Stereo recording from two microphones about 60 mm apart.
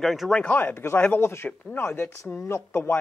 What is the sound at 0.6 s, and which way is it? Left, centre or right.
Speech, left.